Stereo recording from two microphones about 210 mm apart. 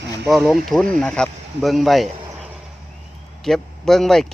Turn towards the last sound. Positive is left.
turn(degrees=0)  # may be behind; listen again after turning